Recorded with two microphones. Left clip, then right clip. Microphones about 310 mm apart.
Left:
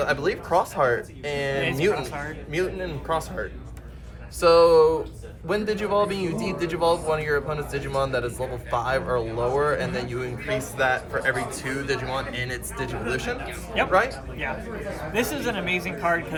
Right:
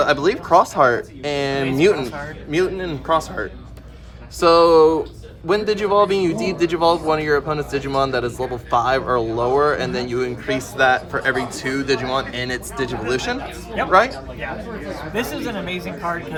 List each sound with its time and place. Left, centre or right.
0.0 s speech: right
15.1 s speech: centre